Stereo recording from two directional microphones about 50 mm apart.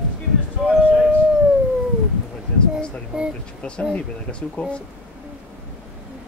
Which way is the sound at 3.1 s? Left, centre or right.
Right.